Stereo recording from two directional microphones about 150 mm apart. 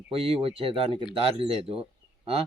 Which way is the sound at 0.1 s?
40° right (ahead or behind).